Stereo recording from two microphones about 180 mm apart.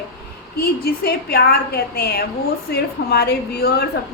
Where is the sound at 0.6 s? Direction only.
60° left (ahead or behind).